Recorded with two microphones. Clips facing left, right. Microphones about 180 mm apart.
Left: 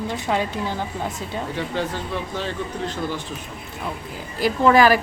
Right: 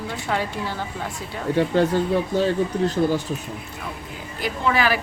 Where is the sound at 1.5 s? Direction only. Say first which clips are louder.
Right 10 dB; 45° right (ahead or behind).